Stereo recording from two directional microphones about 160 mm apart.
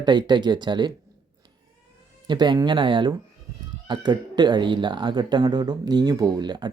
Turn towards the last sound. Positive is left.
turn(degrees=-25)  # may be behind; listen again after turning